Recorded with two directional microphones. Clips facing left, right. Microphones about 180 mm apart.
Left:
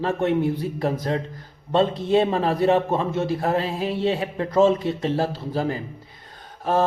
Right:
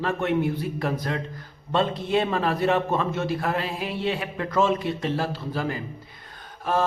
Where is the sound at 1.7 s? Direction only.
30° left (ahead or behind).